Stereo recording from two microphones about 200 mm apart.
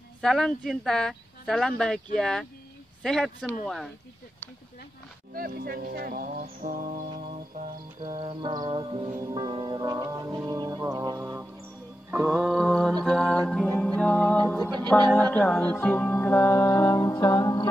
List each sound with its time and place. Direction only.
0.2 s speech: centre (ahead or behind)
5.3 s speech: 50° right (ahead or behind)
8.0 s music: 25° right (ahead or behind); by 17.6 s 20° left (ahead or behind)